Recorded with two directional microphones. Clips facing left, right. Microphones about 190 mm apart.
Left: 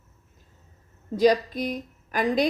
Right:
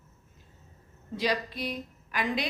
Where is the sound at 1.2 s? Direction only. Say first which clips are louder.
Left 10 dB; 45° left (ahead or behind).